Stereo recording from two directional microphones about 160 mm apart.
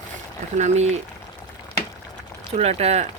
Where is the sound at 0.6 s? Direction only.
45° right (ahead or behind).